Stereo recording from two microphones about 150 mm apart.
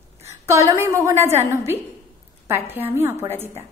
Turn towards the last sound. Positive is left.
turn(degrees=-15)  # may be behind; listen again after turning